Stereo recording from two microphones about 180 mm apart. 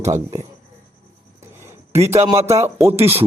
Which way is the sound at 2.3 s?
15° right (ahead or behind).